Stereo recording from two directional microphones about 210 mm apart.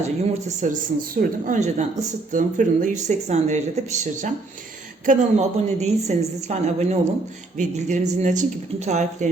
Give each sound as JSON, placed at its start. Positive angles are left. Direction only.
{"t": 0.4, "sound": "a woman's voice", "side_deg": -35}